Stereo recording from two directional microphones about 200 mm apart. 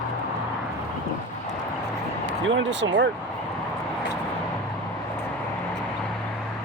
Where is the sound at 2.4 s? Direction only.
65° right (ahead or behind).